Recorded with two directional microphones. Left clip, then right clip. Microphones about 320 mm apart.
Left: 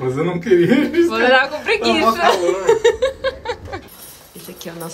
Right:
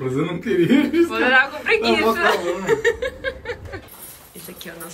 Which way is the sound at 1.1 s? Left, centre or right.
Centre.